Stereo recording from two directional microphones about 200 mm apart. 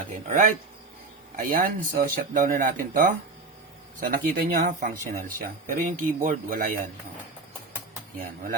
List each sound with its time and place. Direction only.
0.3 s speech: 40° right (ahead or behind)